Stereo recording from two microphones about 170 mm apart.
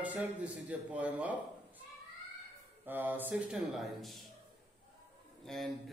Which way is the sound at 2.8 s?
10° right (ahead or behind).